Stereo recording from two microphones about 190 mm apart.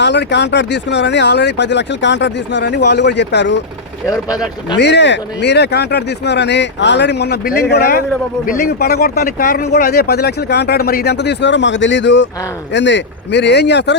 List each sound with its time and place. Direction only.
0.0 s speech: 65° left (ahead or behind)
4.0 s speech: 20° left (ahead or behind)
4.8 s speech: 65° left (ahead or behind)